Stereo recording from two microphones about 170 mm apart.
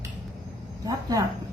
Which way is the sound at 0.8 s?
20° right (ahead or behind).